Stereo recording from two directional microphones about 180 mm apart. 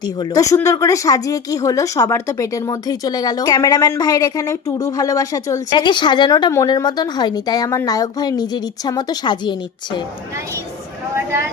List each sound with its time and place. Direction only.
0.0 s speech: 20° left (ahead or behind)